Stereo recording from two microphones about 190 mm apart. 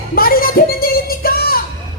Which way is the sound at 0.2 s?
50° left (ahead or behind).